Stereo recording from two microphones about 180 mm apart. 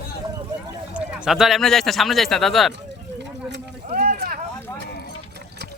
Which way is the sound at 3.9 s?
50° right (ahead or behind).